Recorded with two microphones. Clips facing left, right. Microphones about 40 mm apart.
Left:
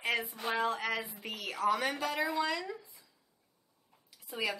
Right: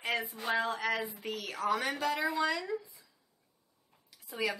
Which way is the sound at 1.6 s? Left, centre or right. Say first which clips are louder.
Left 1 dB; centre.